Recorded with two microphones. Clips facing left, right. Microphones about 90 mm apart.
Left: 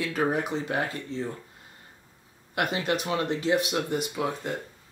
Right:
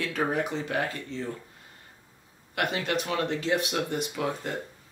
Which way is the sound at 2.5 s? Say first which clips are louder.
Left 1 dB; 20° left (ahead or behind).